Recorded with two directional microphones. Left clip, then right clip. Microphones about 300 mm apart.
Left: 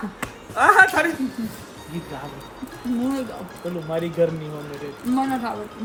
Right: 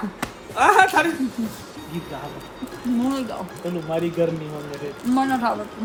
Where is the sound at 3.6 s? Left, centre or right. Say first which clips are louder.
Right 1 dB; centre.